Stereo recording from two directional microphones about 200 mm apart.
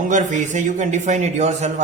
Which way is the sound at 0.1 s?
40° right (ahead or behind).